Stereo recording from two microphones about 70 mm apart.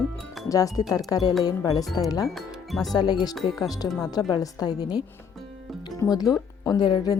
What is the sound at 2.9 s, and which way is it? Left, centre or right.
Speech, left.